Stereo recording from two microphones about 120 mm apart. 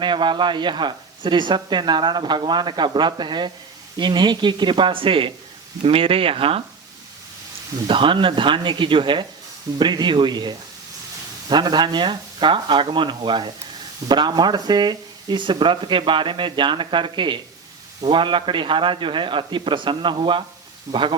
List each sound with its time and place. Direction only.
0.0 s speech: 40° right (ahead or behind)
7.9 s speech: 45° right (ahead or behind)